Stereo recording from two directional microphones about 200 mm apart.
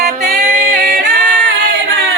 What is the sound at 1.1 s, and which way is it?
Singing, 65° right (ahead or behind).